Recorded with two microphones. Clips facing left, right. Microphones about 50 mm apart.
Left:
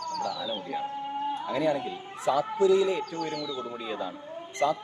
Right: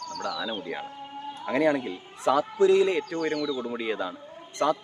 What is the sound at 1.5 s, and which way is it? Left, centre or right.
Speech, right.